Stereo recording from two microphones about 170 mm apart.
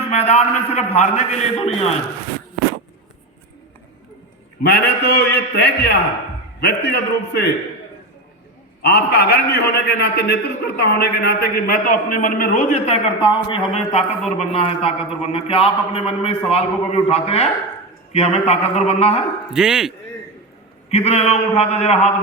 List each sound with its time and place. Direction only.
0.1 s a man's voice: 40° left (ahead or behind)
4.6 s a man's voice: 70° left (ahead or behind)
8.8 s a man's voice: 75° left (ahead or behind); by 12.8 s 50° left (ahead or behind)
13.3 s a man's voice: 30° left (ahead or behind)
19.5 s speech: 5° right (ahead or behind)
20.9 s a man's voice: 40° left (ahead or behind)